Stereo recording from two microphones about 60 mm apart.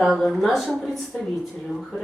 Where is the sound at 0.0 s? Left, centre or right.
Centre.